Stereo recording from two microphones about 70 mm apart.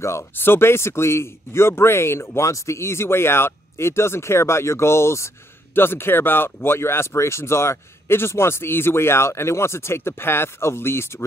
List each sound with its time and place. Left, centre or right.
0.0 s speech: left